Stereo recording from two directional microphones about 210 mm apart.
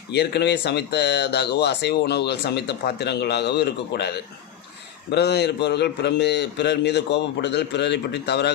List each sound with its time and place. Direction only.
0.1 s speech: 50° left (ahead or behind)
5.1 s speech: 50° left (ahead or behind)